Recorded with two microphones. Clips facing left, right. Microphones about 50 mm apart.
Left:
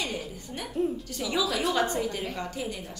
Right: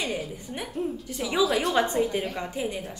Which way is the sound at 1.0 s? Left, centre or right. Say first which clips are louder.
Right 4 dB; centre.